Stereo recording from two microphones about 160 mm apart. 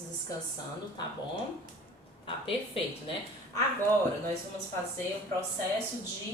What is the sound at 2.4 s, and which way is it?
Speech, 35° left (ahead or behind).